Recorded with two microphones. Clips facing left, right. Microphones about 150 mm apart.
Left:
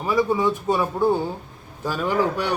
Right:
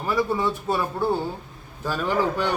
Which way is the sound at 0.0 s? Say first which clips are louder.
Left 3 dB; 10° left (ahead or behind).